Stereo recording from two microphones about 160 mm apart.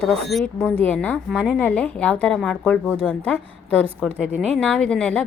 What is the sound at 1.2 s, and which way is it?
A woman's voice, centre (ahead or behind).